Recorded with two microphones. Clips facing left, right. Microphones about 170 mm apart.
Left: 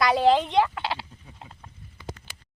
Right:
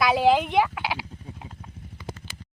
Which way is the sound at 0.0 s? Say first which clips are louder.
Even; 5° right (ahead or behind).